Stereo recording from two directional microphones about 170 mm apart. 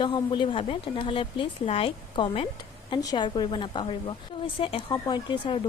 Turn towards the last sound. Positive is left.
turn(degrees=30)  # may be behind; listen again after turning